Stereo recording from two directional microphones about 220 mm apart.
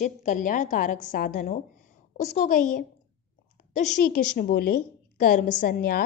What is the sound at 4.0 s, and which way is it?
A woman's voice, 40° left (ahead or behind).